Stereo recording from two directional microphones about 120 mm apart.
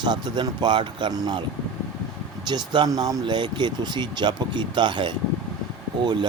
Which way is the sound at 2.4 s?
40° right (ahead or behind).